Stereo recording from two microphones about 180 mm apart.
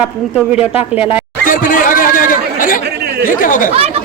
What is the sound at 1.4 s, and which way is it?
Speech, 50° left (ahead or behind).